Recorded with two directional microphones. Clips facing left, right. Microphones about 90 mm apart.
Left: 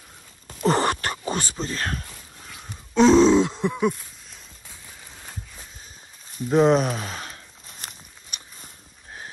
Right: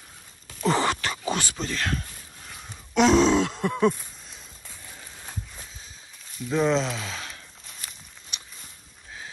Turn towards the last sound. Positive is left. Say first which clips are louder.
# left 3 dB
turn(degrees=35)  # may be behind; listen again after turning